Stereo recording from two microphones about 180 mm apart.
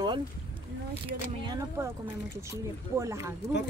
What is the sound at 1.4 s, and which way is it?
Speech, 20° right (ahead or behind).